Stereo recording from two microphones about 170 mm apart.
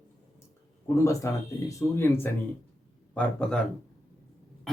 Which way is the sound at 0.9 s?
20° left (ahead or behind).